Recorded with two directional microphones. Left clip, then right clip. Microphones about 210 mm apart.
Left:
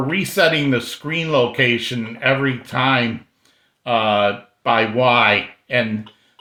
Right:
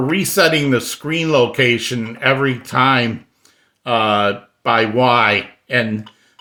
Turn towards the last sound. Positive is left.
turn(degrees=-35)  # may be behind; listen again after turning